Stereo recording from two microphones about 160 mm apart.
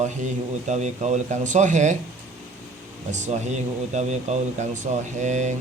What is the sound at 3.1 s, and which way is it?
Speech, 45° right (ahead or behind).